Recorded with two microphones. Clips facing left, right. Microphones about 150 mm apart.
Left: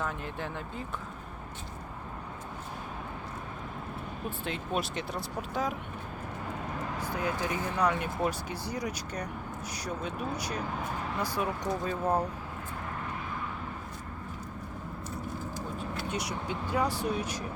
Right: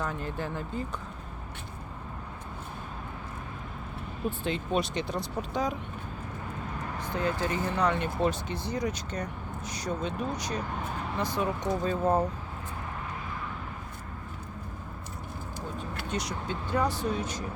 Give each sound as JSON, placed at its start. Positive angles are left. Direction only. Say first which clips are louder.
{"t": 0.0, "sound": "speech", "louder": "right 2 dB", "side_deg": 0}
{"t": 4.3, "sound": "speech", "louder": "right 5 dB", "side_deg": 0}
{"t": 7.0, "sound": "speech", "louder": "right 3 dB", "side_deg": 10}
{"t": 16.0, "sound": "speech", "louder": "right 2 dB", "side_deg": 10}